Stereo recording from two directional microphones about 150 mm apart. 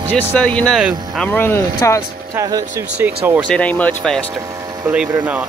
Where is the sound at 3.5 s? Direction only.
10° left (ahead or behind).